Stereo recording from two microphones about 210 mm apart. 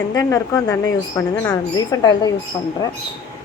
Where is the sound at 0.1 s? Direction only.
15° left (ahead or behind).